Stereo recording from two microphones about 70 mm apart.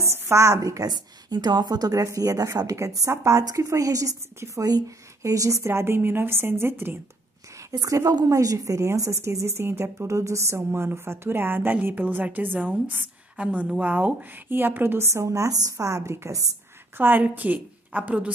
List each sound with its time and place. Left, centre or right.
0.1 s a woman's voice: right
5.7 s a woman's voice: right
7.9 s a woman's voice: right
16.9 s a woman's voice: right